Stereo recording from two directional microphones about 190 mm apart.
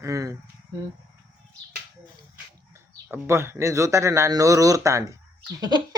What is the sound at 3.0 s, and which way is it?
Speech, 10° right (ahead or behind).